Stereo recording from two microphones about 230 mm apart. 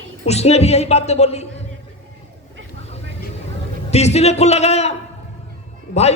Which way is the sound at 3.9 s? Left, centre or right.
Left.